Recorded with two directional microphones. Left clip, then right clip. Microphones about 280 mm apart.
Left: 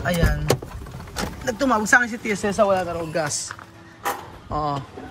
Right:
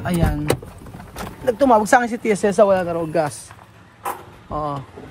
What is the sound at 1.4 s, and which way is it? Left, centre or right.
Speech, centre.